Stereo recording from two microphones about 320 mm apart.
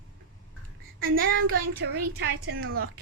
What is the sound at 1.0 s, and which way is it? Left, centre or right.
Child singing, right.